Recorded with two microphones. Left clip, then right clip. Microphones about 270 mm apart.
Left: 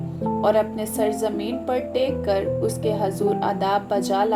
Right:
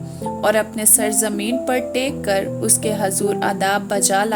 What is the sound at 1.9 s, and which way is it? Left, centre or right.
Speech, right.